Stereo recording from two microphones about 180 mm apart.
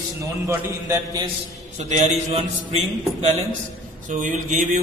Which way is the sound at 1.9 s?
40° right (ahead or behind).